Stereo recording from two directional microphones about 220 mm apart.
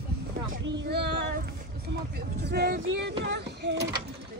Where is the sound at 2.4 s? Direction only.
50° right (ahead or behind).